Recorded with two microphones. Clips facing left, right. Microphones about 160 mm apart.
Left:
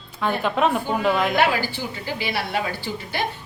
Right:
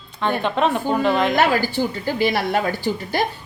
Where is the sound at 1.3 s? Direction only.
45° right (ahead or behind).